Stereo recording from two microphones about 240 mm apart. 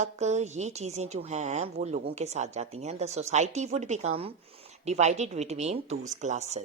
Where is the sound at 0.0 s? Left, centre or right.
Right.